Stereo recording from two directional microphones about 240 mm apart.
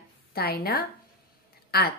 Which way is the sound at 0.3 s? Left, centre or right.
Left.